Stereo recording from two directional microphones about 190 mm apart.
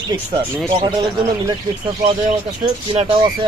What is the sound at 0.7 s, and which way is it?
Speech, 25° right (ahead or behind).